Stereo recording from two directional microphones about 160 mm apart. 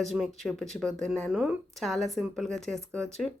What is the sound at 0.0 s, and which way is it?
Speech, centre (ahead or behind).